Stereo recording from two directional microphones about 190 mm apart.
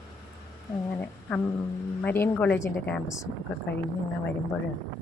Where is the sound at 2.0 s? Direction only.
10° left (ahead or behind).